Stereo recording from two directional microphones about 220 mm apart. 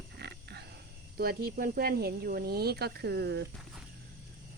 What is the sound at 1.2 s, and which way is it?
Speech, 45° right (ahead or behind).